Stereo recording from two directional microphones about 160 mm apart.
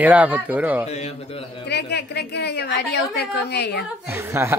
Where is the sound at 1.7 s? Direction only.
90° left.